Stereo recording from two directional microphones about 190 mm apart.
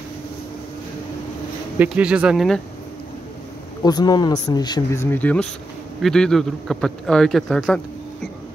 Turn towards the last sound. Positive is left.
turn(degrees=5)  # may be behind; listen again after turning